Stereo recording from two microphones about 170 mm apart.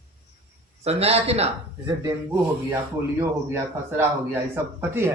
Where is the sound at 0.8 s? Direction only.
35° right (ahead or behind).